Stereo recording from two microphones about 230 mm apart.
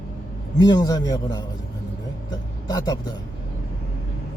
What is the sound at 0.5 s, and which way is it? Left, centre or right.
Speech, centre.